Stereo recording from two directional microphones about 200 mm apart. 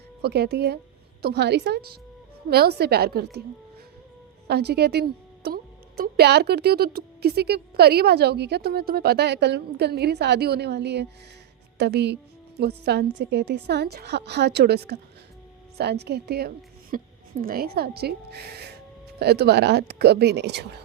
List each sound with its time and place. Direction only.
0.2 s a woman's voice: 50° right (ahead or behind)
4.4 s a woman's voice: 55° right (ahead or behind)